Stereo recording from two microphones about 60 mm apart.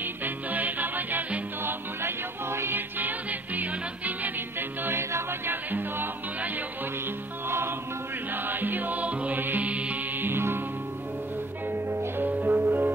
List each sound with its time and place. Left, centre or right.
0.0 s music: right
3.0 s music: right
7.4 s music: right
10.2 s music: right
11.7 s music: right